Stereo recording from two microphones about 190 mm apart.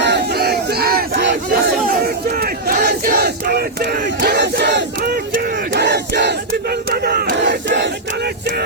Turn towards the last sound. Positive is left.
turn(degrees=-65)  # may be behind; listen again after turning